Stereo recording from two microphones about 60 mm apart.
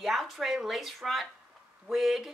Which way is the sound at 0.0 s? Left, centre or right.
Centre.